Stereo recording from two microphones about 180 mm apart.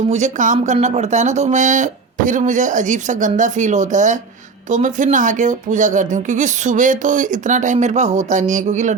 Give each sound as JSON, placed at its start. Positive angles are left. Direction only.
{"t": 0.1, "sound": "speech", "side_deg": -45}